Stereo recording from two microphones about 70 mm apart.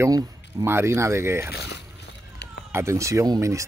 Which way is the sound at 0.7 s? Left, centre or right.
Right.